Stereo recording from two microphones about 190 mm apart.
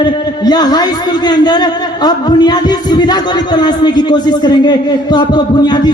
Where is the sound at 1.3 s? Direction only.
20° left (ahead or behind).